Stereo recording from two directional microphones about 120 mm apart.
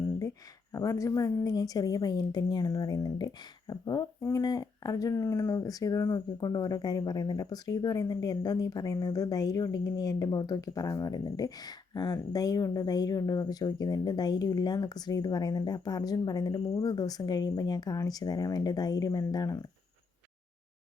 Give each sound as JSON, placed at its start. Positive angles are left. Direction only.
{"t": 0.7, "sound": "speech", "side_deg": 25}